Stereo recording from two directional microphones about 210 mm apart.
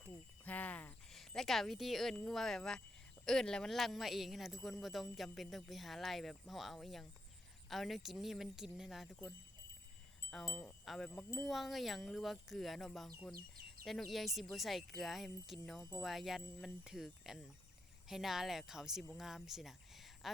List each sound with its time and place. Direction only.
0.4 s speech: 5° left (ahead or behind)
10.3 s speech: 5° left (ahead or behind)
13.3 s speech: 45° right (ahead or behind)
13.8 s speech: centre (ahead or behind)
16.0 s speech: centre (ahead or behind)